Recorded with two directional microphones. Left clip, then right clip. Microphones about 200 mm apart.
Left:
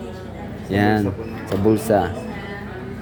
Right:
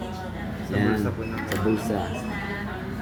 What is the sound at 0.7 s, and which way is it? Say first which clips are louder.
Speech: left 7 dB; 45° left (ahead or behind).